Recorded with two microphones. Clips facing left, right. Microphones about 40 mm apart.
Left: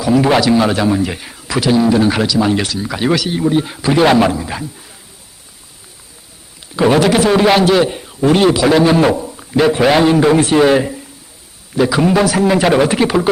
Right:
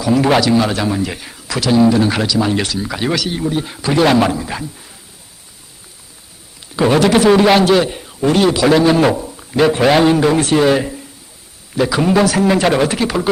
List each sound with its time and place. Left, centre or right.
0.0 s a man's voice: centre
1.7 s a man's voice: centre
6.7 s a man's voice: centre
12.9 s a man's voice: centre